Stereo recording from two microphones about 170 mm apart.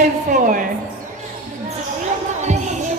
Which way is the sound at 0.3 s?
55° right (ahead or behind).